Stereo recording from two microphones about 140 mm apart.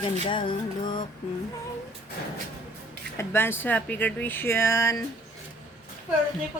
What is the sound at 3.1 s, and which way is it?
Speech, 15° left (ahead or behind).